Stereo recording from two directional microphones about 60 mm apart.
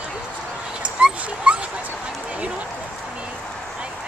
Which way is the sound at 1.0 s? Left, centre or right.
Centre.